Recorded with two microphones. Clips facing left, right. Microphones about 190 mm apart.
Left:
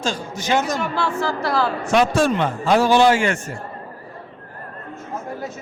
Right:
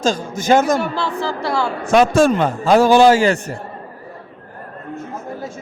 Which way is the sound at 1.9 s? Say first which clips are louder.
Right 5 dB; 45° right (ahead or behind).